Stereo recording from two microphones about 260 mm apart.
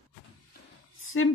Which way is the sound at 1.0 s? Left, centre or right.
Left.